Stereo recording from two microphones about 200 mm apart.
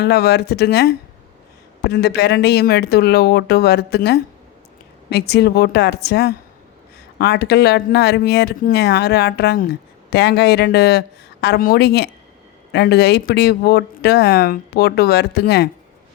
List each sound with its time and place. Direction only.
0.0 s speech: 55° left (ahead or behind)